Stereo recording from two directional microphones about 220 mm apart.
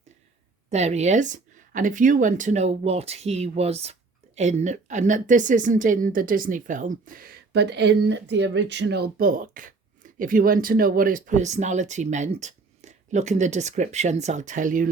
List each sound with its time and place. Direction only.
0.7 s a woman's voice: 30° right (ahead or behind)